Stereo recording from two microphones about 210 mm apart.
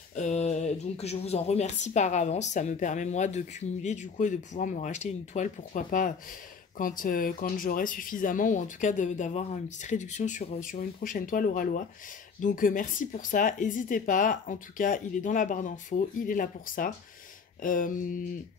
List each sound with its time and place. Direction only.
0.1 s speech: 35° left (ahead or behind)